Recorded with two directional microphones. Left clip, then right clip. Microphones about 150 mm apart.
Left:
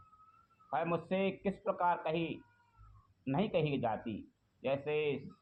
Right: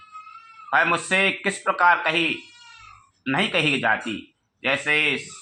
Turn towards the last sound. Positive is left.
turn(degrees=-30)  # may be behind; listen again after turning